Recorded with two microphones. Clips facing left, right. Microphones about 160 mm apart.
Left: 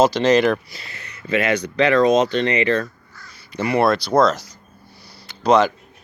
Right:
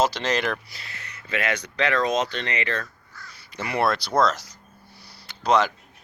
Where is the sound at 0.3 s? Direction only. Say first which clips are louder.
Left 10 dB; 10° left (ahead or behind).